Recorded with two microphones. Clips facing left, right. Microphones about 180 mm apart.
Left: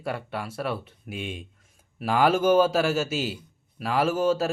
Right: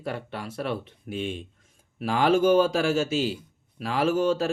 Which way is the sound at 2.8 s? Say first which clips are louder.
Right 2 dB; 5° left (ahead or behind).